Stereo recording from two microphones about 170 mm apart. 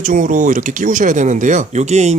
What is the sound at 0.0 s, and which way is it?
Speech, 50° right (ahead or behind).